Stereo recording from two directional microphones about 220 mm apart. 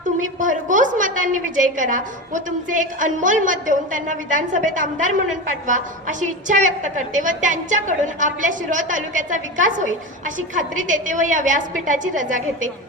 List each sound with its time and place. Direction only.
0.2 s a woman's voice: 35° right (ahead or behind)